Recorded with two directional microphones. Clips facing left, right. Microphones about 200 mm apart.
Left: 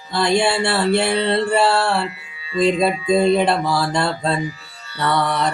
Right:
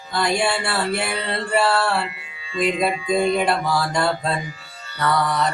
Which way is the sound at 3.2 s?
30° left (ahead or behind).